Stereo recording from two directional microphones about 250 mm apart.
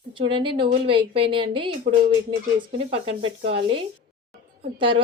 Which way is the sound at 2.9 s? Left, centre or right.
Right.